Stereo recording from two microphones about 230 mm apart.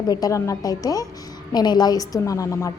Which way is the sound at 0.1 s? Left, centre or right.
Centre.